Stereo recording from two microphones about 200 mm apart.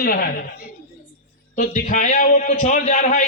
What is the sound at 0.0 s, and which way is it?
Speech, 45° left (ahead or behind).